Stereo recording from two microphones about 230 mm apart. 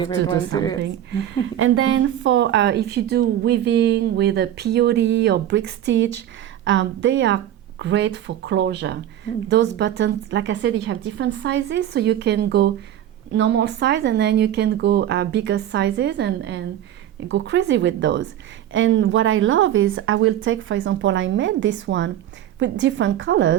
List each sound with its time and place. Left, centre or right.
0.0 s a woman's voice: centre
1.5 s a woman's voice: right